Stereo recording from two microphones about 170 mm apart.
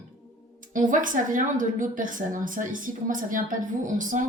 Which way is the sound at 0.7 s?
50° right (ahead or behind).